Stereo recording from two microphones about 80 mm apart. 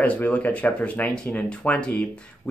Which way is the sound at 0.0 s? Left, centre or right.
Centre.